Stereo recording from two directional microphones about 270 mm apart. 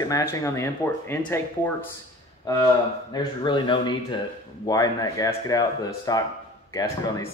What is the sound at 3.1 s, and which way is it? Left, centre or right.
Speech, centre.